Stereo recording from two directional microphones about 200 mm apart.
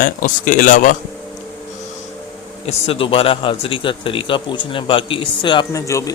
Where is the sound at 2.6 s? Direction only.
30° left (ahead or behind).